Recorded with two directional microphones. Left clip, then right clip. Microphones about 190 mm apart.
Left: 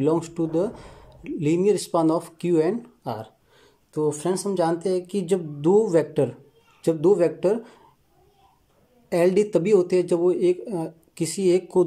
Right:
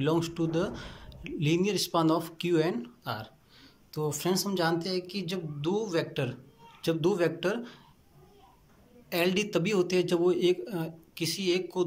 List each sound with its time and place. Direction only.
0.0 s speech: 30° left (ahead or behind)
9.1 s speech: 30° left (ahead or behind)